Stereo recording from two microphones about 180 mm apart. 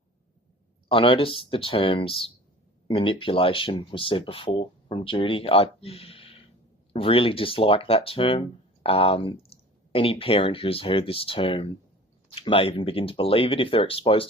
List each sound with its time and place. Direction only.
0.9 s speech: 30° left (ahead or behind)